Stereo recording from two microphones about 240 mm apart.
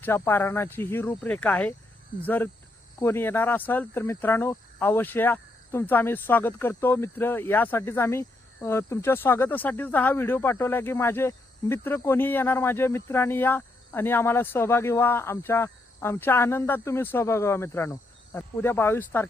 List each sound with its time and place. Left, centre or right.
0.0 s speech: centre